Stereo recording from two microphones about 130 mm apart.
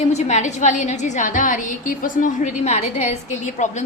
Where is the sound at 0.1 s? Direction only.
60° left (ahead or behind).